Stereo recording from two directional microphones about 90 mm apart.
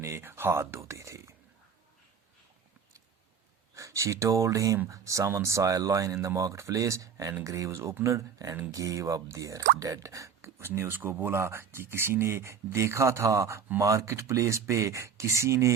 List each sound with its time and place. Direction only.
0.0 s speech: 25° right (ahead or behind)
3.8 s speech: 35° right (ahead or behind)